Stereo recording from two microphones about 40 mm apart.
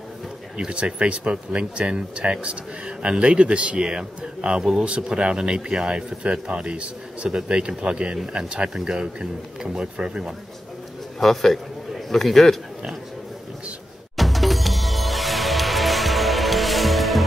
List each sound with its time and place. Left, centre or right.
0.7 s speech: right
11.1 s a man's voice: centre
14.1 s music: centre